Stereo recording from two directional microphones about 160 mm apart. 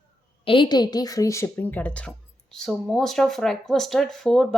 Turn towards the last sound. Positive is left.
turn(degrees=0)  # may be behind; listen again after turning